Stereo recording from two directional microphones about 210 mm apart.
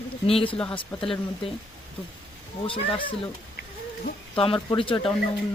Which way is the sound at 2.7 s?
25° left (ahead or behind).